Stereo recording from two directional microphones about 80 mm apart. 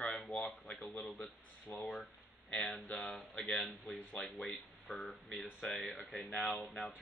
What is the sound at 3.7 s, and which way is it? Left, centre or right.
Speech, centre.